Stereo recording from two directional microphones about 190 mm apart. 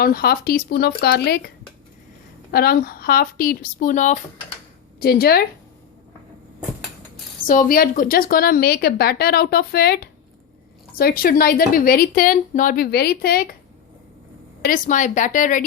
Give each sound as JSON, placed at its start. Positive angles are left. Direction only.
{"t": 0.0, "sound": "speech", "side_deg": 55}
{"t": 2.5, "sound": "a woman's voice", "side_deg": 55}
{"t": 4.9, "sound": "a woman's voice", "side_deg": 55}
{"t": 7.4, "sound": "a woman's voice", "side_deg": 45}
{"t": 14.6, "sound": "a woman's voice", "side_deg": 45}